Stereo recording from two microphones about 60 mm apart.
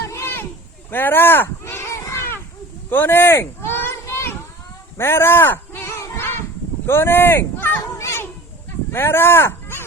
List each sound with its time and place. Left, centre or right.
0.9 s speech: left
1.6 s a sound: left
2.9 s speech: left
3.7 s children playing: left
3.9 s children playing: left
4.9 s speech: left
6.0 s child singing: left
6.8 s speech: left
7.9 s children playing: left
8.9 s speech: left